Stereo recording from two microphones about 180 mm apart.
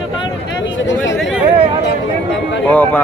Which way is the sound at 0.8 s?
90° left.